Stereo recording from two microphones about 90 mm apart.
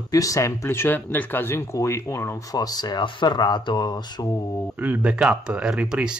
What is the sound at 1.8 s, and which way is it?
Speech, 35° left (ahead or behind).